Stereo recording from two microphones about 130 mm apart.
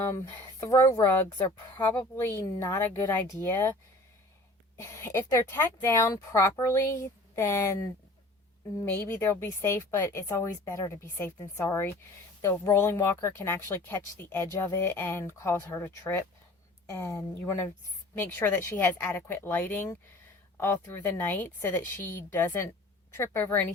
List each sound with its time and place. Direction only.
0.6 s a woman's voice: 20° left (ahead or behind)
4.8 s a woman's voice: 20° left (ahead or behind)